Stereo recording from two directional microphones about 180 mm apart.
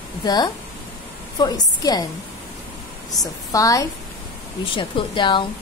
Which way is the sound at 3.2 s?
20° left (ahead or behind).